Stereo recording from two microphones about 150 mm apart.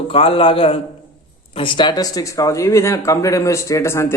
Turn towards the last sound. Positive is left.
turn(degrees=15)  # may be behind; listen again after turning